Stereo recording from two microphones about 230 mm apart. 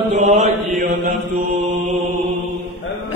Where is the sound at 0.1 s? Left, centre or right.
Right.